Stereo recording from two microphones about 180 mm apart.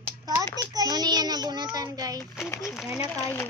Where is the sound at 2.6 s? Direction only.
5° right (ahead or behind).